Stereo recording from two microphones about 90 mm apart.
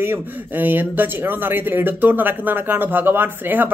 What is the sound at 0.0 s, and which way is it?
Speech, 25° right (ahead or behind).